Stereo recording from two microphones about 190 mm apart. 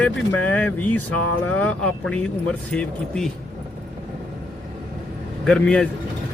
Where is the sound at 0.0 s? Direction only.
10° left (ahead or behind).